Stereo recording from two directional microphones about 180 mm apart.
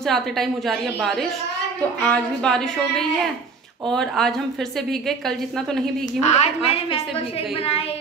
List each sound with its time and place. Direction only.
0.1 s a woman's voice: centre (ahead or behind)
6.2 s a woman's voice: 40° left (ahead or behind)